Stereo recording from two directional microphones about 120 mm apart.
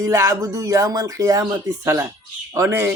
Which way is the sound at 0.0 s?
25° right (ahead or behind).